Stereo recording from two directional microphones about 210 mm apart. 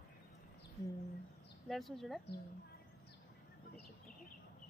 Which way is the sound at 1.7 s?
Centre (ahead or behind).